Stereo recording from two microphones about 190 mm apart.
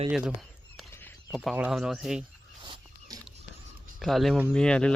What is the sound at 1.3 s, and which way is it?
Speech, centre (ahead or behind).